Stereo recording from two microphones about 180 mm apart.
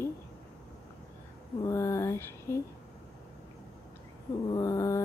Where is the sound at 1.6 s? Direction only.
15° left (ahead or behind).